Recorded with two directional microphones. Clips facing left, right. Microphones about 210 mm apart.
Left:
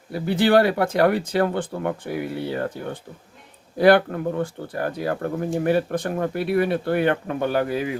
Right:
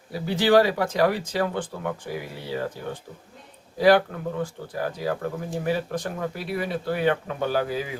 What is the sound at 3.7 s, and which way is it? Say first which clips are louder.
Speech: left 3 dB; 60° left (ahead or behind).